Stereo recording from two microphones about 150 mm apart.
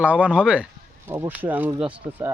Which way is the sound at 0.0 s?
10° right (ahead or behind).